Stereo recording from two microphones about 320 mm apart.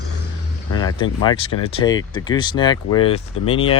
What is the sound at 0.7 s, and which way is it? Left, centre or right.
Vehicle, centre.